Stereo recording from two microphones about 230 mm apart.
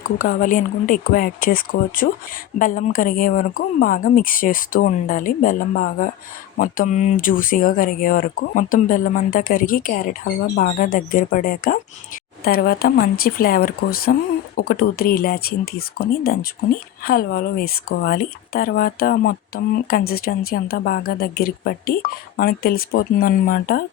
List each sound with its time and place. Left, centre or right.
0.0 s speech: left